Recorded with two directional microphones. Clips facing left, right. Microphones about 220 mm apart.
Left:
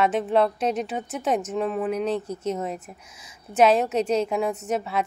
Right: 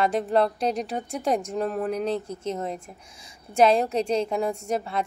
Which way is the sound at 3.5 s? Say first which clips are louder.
Left 1 dB; 5° left (ahead or behind).